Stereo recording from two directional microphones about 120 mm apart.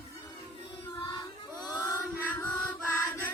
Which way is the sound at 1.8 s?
20° left (ahead or behind).